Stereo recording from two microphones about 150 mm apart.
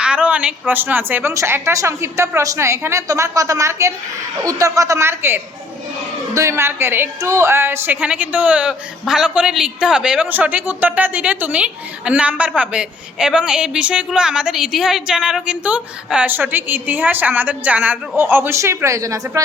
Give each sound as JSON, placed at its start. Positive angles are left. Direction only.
{"t": 0.0, "sound": "a woman's voice", "side_deg": -10}